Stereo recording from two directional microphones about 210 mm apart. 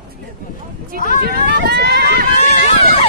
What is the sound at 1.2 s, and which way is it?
Run, 50° right (ahead or behind).